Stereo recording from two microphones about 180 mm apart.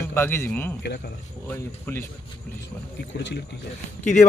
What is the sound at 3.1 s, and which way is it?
Speech, 75° left (ahead or behind).